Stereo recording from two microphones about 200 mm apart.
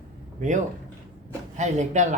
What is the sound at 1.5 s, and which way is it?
Speech, 35° right (ahead or behind).